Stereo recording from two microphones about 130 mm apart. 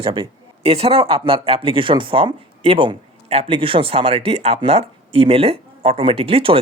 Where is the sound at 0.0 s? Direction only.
40° right (ahead or behind).